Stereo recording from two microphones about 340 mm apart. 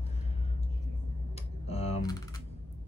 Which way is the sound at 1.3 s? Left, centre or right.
Centre.